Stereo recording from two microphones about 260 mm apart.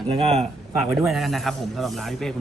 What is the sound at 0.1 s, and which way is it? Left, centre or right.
Speech, right.